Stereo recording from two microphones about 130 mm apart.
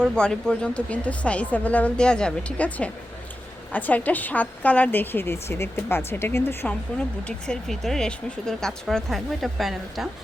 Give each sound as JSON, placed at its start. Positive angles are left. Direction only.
{"t": 0.0, "sound": "a woman's voice", "side_deg": 5}
{"t": 7.3, "sound": "speech", "side_deg": 5}